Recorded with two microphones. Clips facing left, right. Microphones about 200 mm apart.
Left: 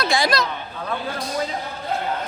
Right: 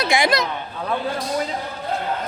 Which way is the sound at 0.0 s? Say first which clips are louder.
Right 1 dB; 20° right (ahead or behind).